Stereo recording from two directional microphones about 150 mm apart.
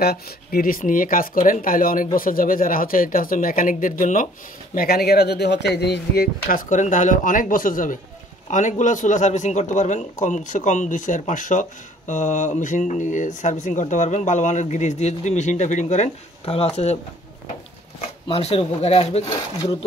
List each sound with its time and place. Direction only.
0.0 s speech: 85° left; by 4.3 s 60° left (ahead or behind)
4.7 s speech: 90° left; by 17.0 s 45° left (ahead or behind)
18.3 s speech: 40° left (ahead or behind)